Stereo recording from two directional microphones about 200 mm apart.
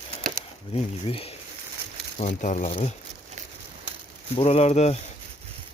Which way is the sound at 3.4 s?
40° right (ahead or behind).